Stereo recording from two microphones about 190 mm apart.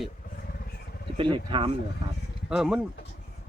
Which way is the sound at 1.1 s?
25° right (ahead or behind).